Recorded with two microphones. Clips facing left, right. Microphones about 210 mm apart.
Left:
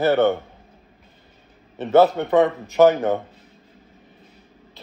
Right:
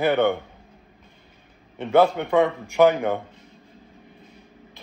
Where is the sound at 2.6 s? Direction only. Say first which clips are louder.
Left 2 dB; 15° right (ahead or behind).